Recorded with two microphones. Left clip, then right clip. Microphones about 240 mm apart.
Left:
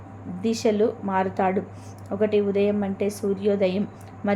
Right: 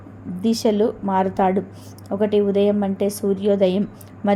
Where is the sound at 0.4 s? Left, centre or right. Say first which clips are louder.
Right 3 dB; right.